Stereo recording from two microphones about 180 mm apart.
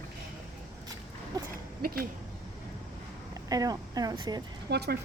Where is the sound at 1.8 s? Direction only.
55° right (ahead or behind).